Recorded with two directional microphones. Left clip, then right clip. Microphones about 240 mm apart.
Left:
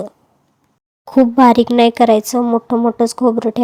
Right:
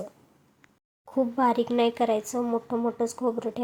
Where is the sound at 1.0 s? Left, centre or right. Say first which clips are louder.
Left 14 dB; left.